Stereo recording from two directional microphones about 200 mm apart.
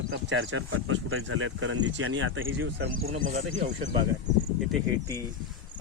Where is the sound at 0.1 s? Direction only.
80° right.